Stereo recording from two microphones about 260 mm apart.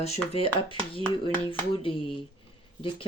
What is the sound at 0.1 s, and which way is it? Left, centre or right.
Speech, left.